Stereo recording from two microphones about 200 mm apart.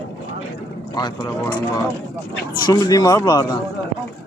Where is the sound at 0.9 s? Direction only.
20° left (ahead or behind).